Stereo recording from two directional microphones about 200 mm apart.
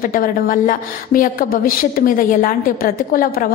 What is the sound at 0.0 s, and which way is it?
A woman's voice, 45° left (ahead or behind).